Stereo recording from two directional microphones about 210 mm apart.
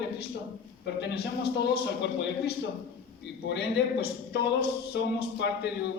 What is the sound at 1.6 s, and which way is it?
Speech, 55° left (ahead or behind).